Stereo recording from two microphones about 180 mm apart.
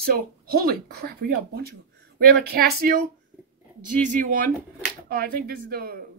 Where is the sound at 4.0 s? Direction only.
50° right (ahead or behind).